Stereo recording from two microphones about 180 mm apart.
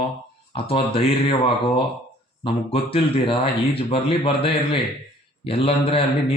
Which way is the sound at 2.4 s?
30° left (ahead or behind).